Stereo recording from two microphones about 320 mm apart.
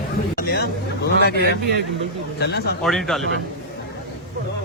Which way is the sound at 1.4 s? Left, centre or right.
Right.